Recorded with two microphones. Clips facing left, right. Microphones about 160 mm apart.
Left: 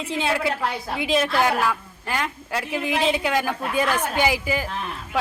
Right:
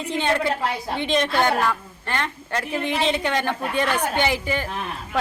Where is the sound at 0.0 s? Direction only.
Centre (ahead or behind).